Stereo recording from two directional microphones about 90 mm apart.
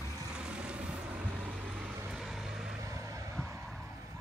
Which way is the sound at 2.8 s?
35° right (ahead or behind).